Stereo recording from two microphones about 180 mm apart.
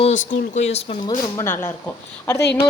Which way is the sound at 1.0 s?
20° left (ahead or behind).